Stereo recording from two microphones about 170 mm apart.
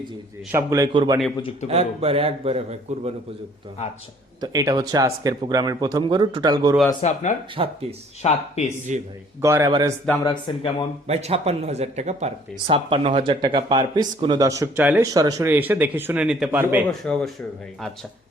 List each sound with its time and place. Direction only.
0.5 s speech: 20° right (ahead or behind)
1.7 s speech: 35° right (ahead or behind)
4.4 s speech: 20° right (ahead or behind)
7.0 s speech: 45° left (ahead or behind)
7.5 s speech: 35° right (ahead or behind)
8.2 s speech: 40° left (ahead or behind)
9.4 s speech: 15° right (ahead or behind)
10.2 s speech: 25° left (ahead or behind)
11.0 s speech: 40° right (ahead or behind); by 14.7 s 20° right (ahead or behind)
14.8 s speech: 10° right (ahead or behind)
15.0 s speech: 20° right (ahead or behind)
16.9 s speech: 5° left (ahead or behind)